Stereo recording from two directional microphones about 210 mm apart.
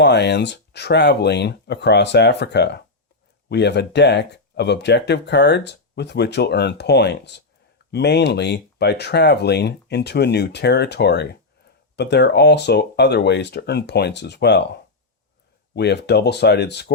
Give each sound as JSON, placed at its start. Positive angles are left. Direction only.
{"t": 0.0, "sound": "speech", "side_deg": 55}
{"t": 15.7, "sound": "speech", "side_deg": 55}